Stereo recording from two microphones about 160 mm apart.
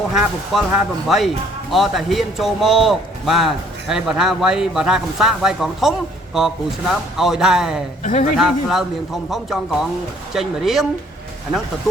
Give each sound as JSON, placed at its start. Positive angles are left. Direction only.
{"t": 0.1, "sound": "a man's voice", "side_deg": -5}
{"t": 8.0, "sound": "speech", "side_deg": 45}
{"t": 8.4, "sound": "a man's voice", "side_deg": -5}